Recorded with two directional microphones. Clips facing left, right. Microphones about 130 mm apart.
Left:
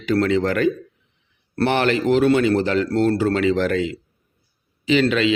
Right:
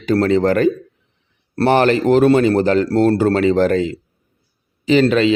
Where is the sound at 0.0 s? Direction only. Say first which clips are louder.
Right 4 dB; 40° right (ahead or behind).